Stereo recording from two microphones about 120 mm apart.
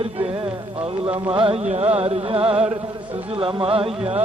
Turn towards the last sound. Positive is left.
turn(degrees=-50)  # may be behind; listen again after turning